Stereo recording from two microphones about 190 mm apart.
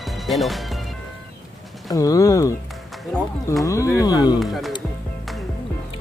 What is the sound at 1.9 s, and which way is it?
Speech, 20° left (ahead or behind).